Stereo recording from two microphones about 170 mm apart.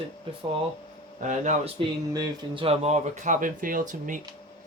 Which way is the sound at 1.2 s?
45° right (ahead or behind).